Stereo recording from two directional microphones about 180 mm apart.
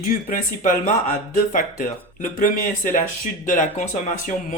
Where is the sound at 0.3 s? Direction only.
45° left (ahead or behind).